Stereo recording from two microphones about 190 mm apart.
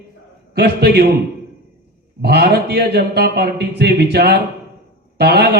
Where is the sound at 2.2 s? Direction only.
60° right (ahead or behind).